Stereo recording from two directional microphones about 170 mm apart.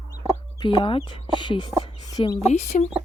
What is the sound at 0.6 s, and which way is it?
Speech, 30° left (ahead or behind).